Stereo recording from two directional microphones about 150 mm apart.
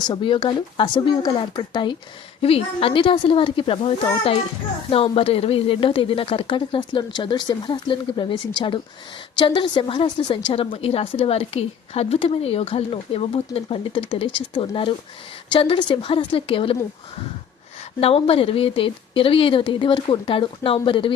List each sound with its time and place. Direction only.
0.0 s a woman's voice: 30° left (ahead or behind)
9.4 s a woman's voice: 30° left (ahead or behind)
18.0 s a woman's voice: 40° left (ahead or behind)